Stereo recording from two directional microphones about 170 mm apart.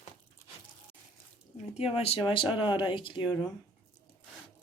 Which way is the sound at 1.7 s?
35° left (ahead or behind).